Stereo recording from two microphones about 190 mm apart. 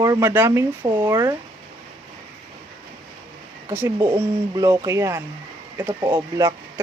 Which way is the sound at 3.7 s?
15° right (ahead or behind).